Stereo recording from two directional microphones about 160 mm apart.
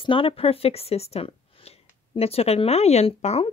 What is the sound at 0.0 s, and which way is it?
A woman's voice, 35° left (ahead or behind).